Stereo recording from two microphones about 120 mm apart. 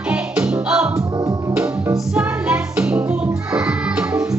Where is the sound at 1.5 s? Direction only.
10° right (ahead or behind).